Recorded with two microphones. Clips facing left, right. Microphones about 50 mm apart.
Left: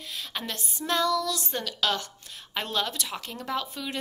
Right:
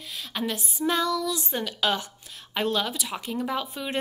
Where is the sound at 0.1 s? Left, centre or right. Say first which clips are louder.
Right 5 dB; centre.